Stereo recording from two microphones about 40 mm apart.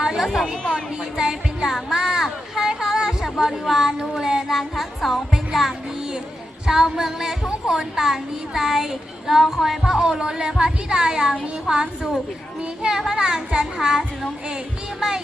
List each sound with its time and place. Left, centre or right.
0.0 s a sound: centre
0.3 s speech: centre
1.1 s a sound: centre
3.2 s speech: centre
5.3 s music: centre
6.7 s speech: centre